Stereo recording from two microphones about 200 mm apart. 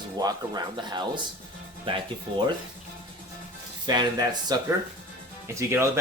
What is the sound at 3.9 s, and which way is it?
Speech, 20° right (ahead or behind).